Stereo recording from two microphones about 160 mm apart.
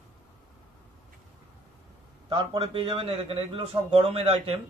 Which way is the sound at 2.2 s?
30° right (ahead or behind).